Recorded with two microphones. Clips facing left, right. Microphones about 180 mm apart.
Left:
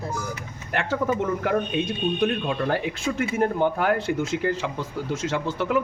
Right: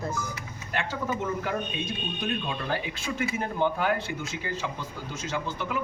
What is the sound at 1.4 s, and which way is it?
Speech, 55° left (ahead or behind).